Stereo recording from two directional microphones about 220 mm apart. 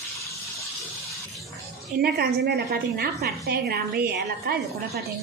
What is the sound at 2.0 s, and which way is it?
A woman's voice, 45° right (ahead or behind).